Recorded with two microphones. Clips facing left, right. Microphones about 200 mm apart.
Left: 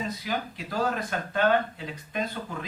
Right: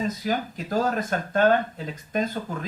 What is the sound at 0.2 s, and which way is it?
Speech, 45° right (ahead or behind).